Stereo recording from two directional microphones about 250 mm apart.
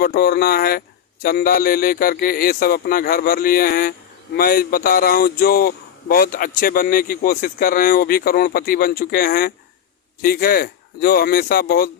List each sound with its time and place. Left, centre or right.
0.0 s a man's voice: left